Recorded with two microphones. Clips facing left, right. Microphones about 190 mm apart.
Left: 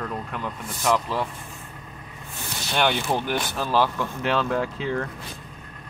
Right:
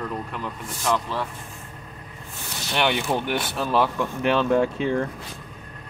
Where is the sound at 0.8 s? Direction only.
5° left (ahead or behind).